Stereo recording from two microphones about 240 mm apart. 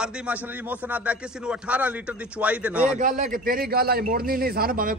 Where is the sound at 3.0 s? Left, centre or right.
Right.